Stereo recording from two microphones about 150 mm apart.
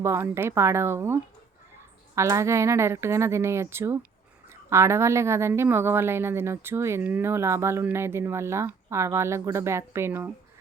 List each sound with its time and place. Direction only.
0.0 s a woman's voice: 15° right (ahead or behind)